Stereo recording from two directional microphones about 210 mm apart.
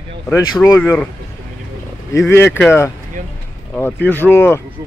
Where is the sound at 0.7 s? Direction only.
10° left (ahead or behind).